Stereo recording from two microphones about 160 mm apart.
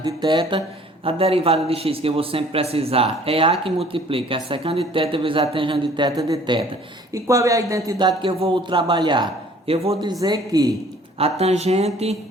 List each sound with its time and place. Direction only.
0.0 s a man's voice: 30° right (ahead or behind)
10.1 s speech: 25° right (ahead or behind)
11.2 s a man's voice: 40° right (ahead or behind)